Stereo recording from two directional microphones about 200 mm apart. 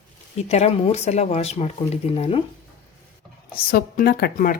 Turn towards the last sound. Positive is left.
turn(degrees=45)  # may be behind; listen again after turning